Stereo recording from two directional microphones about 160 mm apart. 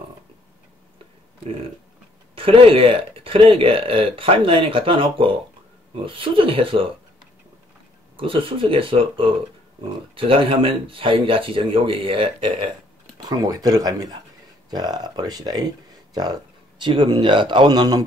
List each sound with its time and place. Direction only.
2.3 s speech: 35° right (ahead or behind)
8.2 s speech: 35° right (ahead or behind)